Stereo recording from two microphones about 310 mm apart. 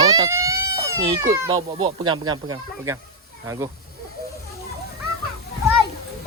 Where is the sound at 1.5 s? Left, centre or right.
Centre.